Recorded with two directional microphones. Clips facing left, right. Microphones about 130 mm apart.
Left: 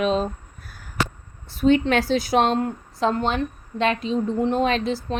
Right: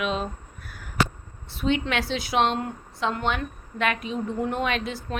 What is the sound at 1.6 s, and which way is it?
A woman's voice, 40° left (ahead or behind).